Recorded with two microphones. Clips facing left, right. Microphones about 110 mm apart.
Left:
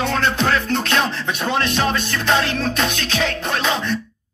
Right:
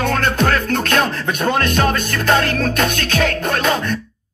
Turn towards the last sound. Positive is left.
turn(degrees=-50)  # may be behind; listen again after turning